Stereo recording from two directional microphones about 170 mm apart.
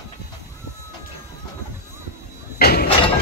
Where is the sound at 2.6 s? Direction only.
65° left (ahead or behind).